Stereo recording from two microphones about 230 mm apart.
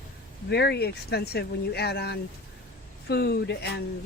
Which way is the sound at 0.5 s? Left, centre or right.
Left.